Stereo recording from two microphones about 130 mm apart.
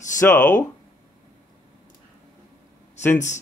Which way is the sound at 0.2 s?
15° left (ahead or behind).